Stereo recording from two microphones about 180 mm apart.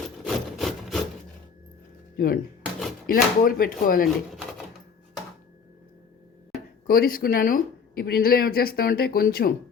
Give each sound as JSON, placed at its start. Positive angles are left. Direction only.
{"t": 0.3, "sound": "rub", "side_deg": 0}
{"t": 2.1, "sound": "speech", "side_deg": 55}
{"t": 6.8, "sound": "speech", "side_deg": 55}